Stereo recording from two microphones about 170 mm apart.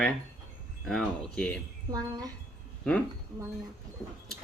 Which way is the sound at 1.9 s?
20° right (ahead or behind).